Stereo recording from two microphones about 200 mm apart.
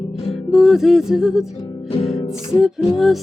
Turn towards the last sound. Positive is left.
turn(degrees=0)  # may be behind; listen again after turning